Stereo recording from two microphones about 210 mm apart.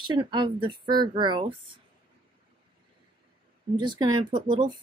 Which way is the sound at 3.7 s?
20° right (ahead or behind).